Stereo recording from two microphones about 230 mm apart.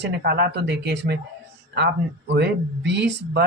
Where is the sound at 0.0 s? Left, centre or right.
Right.